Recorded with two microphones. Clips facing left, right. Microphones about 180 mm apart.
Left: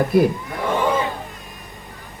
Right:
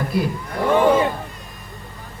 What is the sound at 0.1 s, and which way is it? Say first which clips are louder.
Speech: left 7 dB; 50° left (ahead or behind).